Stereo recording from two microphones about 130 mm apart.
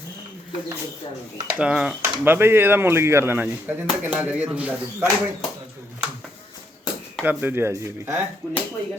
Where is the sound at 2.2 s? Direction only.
15° right (ahead or behind).